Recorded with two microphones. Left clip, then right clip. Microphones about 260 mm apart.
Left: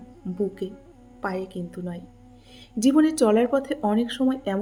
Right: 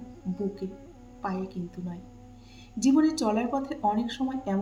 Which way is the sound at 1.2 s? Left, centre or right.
Left.